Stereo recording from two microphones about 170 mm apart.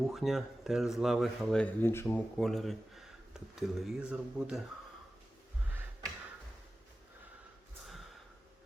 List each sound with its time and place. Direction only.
0.0 s speech: centre (ahead or behind)